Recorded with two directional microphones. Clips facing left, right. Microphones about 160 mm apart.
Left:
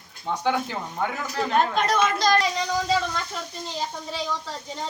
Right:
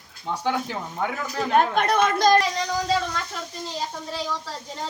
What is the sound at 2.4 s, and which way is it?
Speech, centre (ahead or behind).